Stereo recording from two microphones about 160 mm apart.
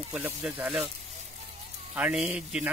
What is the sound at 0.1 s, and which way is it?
Speech, 5° right (ahead or behind).